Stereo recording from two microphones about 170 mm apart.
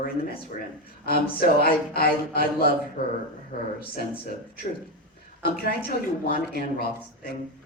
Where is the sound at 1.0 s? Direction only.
60° left (ahead or behind).